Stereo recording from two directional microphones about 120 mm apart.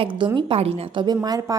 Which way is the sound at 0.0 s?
45° right (ahead or behind).